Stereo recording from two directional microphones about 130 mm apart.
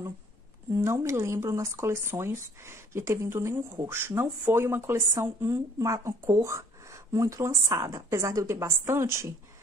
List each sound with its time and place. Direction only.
0.7 s speech: 20° right (ahead or behind)